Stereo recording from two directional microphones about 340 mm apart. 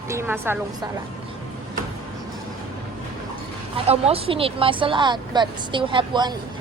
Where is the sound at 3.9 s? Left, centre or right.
Centre.